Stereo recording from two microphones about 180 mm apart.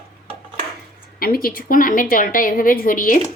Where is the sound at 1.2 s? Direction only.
55° left (ahead or behind).